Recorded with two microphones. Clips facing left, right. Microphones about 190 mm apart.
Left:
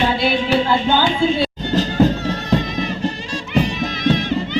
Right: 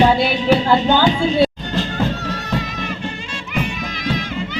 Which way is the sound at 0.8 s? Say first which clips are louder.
Right 1 dB; 40° right (ahead or behind).